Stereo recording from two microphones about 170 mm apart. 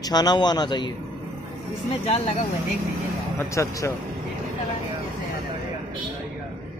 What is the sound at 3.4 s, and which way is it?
Speech, 15° left (ahead or behind).